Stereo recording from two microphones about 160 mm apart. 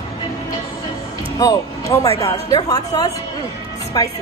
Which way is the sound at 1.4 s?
20° left (ahead or behind).